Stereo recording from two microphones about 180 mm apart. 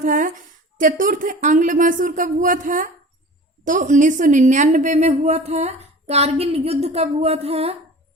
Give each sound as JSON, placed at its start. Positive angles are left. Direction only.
{"t": 0.0, "sound": "a woman's voice", "side_deg": -45}